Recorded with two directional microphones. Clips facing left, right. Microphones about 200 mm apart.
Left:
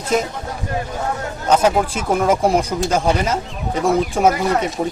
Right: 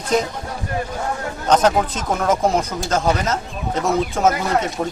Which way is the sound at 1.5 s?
10° left (ahead or behind).